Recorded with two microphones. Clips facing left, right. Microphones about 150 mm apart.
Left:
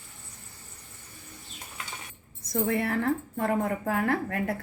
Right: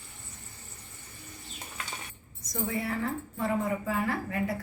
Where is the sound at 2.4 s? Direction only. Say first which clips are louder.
Left 5 dB; 60° left (ahead or behind).